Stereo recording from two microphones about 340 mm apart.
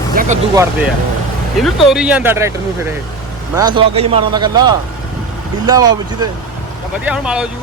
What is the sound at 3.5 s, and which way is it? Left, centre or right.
Speech, centre.